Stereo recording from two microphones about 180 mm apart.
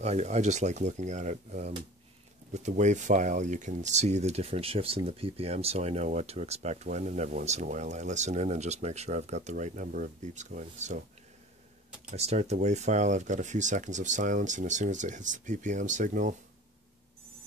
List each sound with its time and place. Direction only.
0.0 s speech: 40° right (ahead or behind)
12.1 s speech: 35° right (ahead or behind)